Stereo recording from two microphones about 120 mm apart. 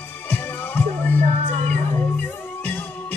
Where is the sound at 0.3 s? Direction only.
15° left (ahead or behind).